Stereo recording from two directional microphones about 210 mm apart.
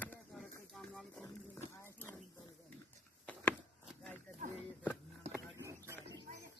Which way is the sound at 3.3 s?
5° left (ahead or behind).